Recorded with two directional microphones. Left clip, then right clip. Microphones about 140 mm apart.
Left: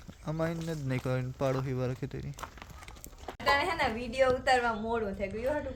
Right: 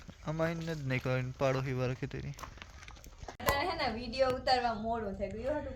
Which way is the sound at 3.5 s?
20° left (ahead or behind).